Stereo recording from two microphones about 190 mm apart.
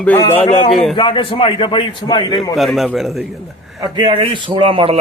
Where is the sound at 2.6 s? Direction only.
Centre (ahead or behind).